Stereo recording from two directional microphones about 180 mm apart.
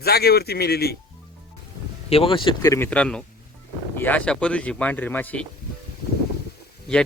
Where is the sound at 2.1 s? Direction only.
30° left (ahead or behind); by 5.5 s 10° left (ahead or behind).